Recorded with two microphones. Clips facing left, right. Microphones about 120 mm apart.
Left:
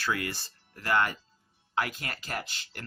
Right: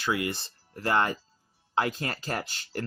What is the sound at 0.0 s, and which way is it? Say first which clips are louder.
Speech: right 3 dB; 20° right (ahead or behind).